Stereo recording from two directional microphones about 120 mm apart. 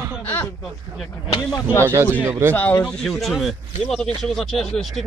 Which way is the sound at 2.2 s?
25° right (ahead or behind).